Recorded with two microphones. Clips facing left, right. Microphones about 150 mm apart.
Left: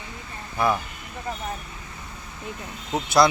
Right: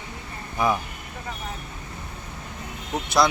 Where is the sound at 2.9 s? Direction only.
Centre (ahead or behind).